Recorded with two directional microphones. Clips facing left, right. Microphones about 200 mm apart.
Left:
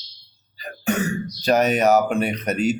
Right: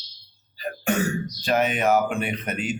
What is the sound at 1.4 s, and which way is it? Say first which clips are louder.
Speech: left 5 dB; 40° left (ahead or behind).